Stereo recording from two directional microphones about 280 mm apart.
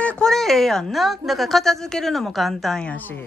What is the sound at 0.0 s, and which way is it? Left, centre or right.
A woman's voice, centre.